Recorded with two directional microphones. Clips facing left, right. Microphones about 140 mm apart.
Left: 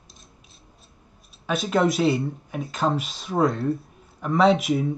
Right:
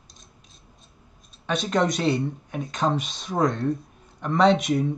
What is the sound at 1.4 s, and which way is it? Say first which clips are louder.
Speech: left 2 dB; 5° left (ahead or behind).